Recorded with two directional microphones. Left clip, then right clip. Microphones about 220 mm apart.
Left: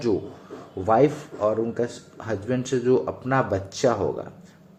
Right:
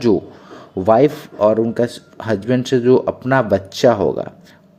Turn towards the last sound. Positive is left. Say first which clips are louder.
# right 9 dB
turn(degrees=-35)  # may be behind; listen again after turning